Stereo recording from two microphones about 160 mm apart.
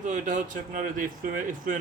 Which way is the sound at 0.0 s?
50° right (ahead or behind).